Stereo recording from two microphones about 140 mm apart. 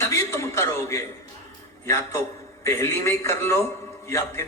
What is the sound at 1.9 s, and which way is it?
A man's voice, 20° left (ahead or behind).